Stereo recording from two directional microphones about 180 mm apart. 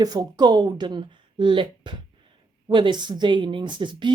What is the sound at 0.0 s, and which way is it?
Speech, 20° right (ahead or behind).